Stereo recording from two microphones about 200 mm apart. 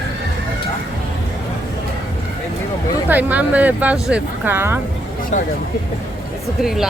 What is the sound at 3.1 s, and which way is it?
Speech, 10° right (ahead or behind).